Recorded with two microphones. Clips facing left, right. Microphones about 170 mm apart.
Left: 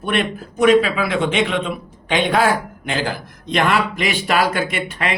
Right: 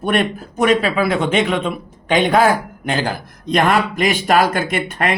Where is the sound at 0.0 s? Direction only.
45° right (ahead or behind).